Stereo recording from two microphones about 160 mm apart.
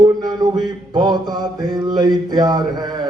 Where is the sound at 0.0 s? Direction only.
25° right (ahead or behind).